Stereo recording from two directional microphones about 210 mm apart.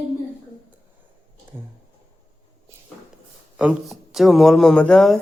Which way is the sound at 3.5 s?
5° right (ahead or behind).